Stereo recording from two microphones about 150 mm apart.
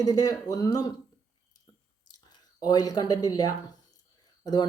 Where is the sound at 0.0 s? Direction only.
25° left (ahead or behind).